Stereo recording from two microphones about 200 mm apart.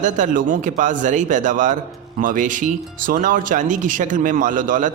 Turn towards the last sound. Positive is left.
turn(degrees=-40)  # may be behind; listen again after turning